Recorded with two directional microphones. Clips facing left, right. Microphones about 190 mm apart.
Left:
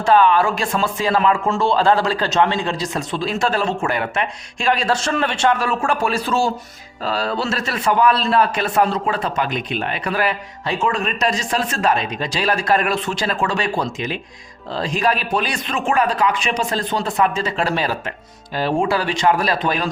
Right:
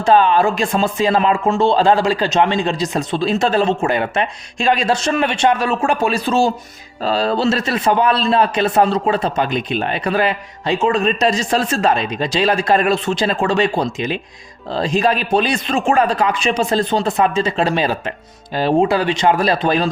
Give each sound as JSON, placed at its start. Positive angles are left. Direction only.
{"t": 0.0, "sound": "a man's voice", "side_deg": -20}